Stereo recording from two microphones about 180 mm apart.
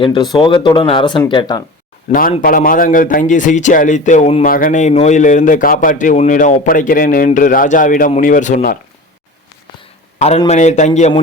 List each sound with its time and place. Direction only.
0.0 s a man's voice: 25° left (ahead or behind)
2.4 s a man's voice: 50° left (ahead or behind)
4.4 s a man's voice: 50° left (ahead or behind)
10.2 s a man's voice: 35° left (ahead or behind)